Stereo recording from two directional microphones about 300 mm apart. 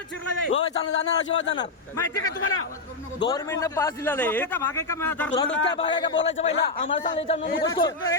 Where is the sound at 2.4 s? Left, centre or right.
Left.